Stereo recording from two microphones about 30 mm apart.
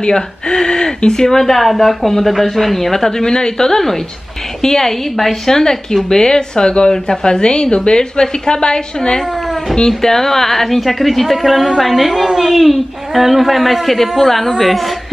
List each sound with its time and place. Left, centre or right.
0.0 s a woman's voice: left
9.8 s a woman's voice: centre